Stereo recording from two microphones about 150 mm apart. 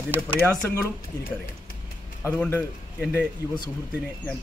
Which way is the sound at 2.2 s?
15° left (ahead or behind).